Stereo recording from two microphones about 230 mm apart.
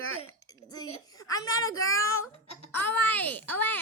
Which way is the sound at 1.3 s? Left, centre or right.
Centre.